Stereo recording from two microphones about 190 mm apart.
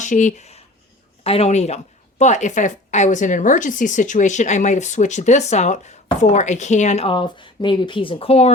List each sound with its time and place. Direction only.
0.0 s a woman's voice: 40° left (ahead or behind)